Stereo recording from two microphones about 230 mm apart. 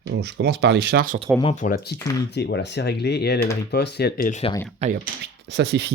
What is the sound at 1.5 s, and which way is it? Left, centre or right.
Speech, left.